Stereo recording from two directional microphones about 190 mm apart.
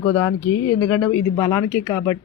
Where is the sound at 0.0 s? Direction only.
15° left (ahead or behind).